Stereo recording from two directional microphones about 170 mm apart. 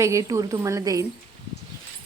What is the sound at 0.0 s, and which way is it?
A woman's voice, 15° right (ahead or behind).